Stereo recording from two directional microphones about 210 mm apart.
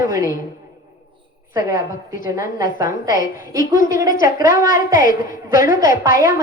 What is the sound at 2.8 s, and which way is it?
A woman's voice, 40° left (ahead or behind).